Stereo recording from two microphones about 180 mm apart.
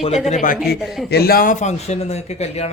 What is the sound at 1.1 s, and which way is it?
Speech, 60° left (ahead or behind).